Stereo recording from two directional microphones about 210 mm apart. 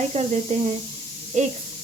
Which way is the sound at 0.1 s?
30° right (ahead or behind).